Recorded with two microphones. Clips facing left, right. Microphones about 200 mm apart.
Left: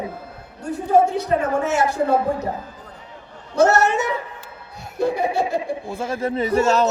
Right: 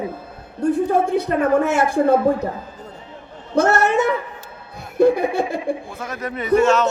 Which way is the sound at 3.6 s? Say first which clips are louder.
Even; 55° right (ahead or behind).